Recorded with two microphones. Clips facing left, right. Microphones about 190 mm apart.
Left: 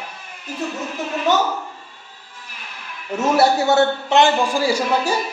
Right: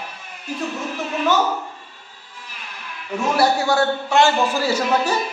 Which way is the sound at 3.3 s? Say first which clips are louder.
Left 3 dB; 20° left (ahead or behind).